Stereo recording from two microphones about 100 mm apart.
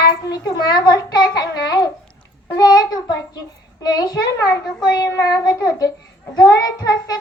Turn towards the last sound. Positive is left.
turn(degrees=40)  # may be behind; listen again after turning